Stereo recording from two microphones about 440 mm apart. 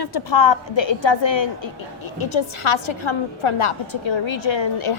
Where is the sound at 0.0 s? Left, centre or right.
Left.